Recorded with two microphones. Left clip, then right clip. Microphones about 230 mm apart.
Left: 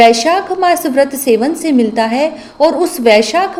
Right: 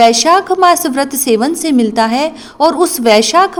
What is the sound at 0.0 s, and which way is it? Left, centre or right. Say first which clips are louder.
A woman's voice: even; right.